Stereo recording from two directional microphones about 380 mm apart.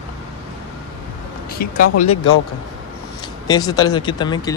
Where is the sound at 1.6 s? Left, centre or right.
Left.